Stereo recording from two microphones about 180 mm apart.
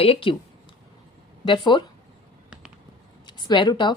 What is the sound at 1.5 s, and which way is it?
Speech, 25° left (ahead or behind).